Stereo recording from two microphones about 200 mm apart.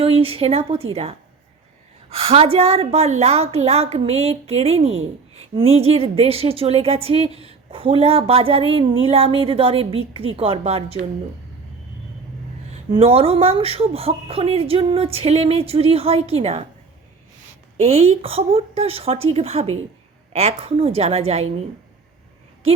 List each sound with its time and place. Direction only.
0.0 s a woman's voice: 30° right (ahead or behind)
2.0 s a woman's voice: 30° right (ahead or behind)
12.9 s a woman's voice: 30° right (ahead or behind)
17.7 s a woman's voice: 30° right (ahead or behind)